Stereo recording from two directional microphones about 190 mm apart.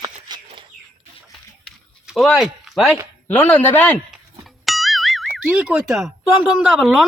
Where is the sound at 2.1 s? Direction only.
Centre (ahead or behind).